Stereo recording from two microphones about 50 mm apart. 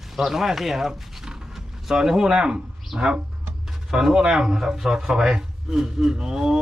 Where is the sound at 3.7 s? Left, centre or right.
Centre.